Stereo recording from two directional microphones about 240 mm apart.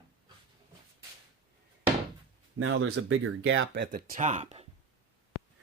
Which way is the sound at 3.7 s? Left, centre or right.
Right.